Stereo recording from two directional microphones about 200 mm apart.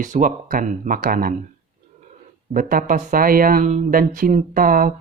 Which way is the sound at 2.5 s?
45° right (ahead or behind).